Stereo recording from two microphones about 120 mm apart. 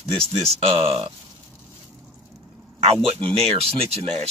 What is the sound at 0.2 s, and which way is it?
Speech, 55° right (ahead or behind).